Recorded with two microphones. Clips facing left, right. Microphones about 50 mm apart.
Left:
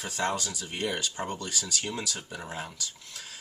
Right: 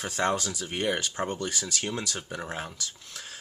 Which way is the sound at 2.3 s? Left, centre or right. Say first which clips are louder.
Right 4 dB; right.